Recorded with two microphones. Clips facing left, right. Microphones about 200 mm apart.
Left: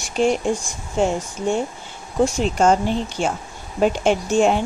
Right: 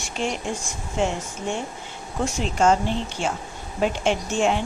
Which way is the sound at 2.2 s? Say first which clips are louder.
Left 4 dB; 40° left (ahead or behind).